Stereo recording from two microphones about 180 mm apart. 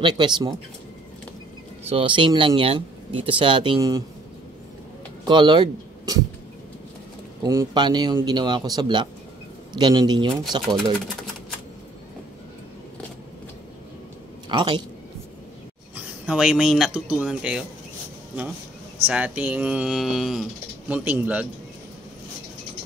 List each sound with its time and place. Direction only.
0.0 s speech: 25° right (ahead or behind)
1.9 s speech: 30° right (ahead or behind)
5.2 s speech: 25° right (ahead or behind)
7.4 s speech: 20° right (ahead or behind)
14.5 s speech: 30° right (ahead or behind)
16.3 s speech: 5° right (ahead or behind)
19.0 s speech: 10° right (ahead or behind)